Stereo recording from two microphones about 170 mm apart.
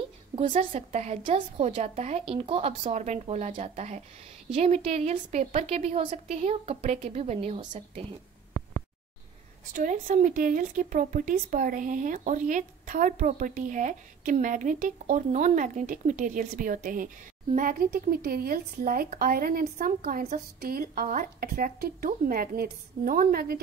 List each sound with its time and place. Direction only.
0.5 s speech: 45° right (ahead or behind)
9.8 s a woman's voice: 50° right (ahead or behind)